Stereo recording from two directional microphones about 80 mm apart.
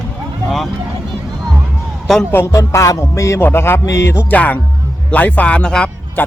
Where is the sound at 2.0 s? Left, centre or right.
Centre.